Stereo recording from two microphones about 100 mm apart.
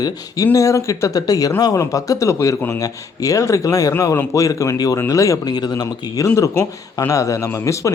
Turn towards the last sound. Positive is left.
turn(degrees=30)  # may be behind; listen again after turning